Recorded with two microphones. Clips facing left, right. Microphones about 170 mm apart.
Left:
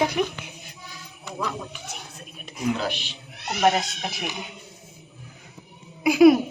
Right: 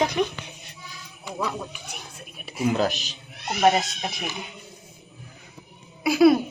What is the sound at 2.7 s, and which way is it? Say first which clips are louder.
Speech: right 5 dB; 40° right (ahead or behind).